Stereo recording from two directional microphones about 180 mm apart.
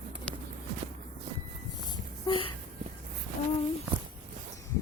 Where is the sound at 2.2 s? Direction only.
30° left (ahead or behind).